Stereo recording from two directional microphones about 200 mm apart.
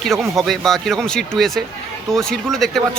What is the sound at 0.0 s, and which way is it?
Speech, centre (ahead or behind).